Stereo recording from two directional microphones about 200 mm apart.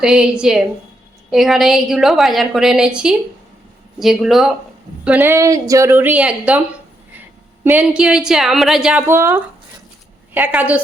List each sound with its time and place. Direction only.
0.0 s a woman's voice: 5° right (ahead or behind)
7.6 s a woman's voice: 10° right (ahead or behind)